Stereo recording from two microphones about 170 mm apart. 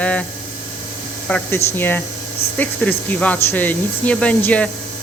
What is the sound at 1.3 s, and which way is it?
Speech, 15° left (ahead or behind).